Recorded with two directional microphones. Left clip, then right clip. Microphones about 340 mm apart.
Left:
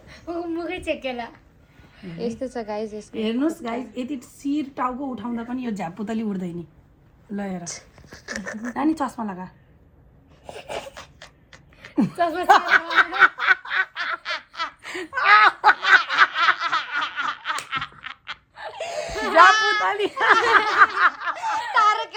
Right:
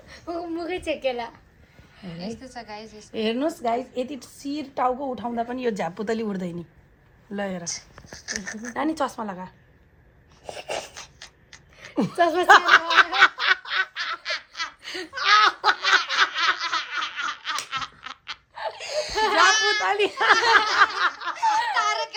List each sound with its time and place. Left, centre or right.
0.1 s a woman's voice: right
2.1 s speech: centre
3.2 s a woman's voice: right
7.6 s speech: centre
8.8 s a woman's voice: centre
10.9 s a sound: centre
12.1 s a woman's voice: right
12.5 s snicker: centre
13.9 s baby laughter: centre
18.7 s laughter: centre
19.4 s a child's voice: centre
20.7 s snicker: centre
21.7 s a sound: centre